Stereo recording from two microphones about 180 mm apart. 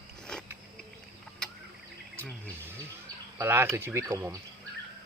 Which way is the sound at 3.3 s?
15° right (ahead or behind).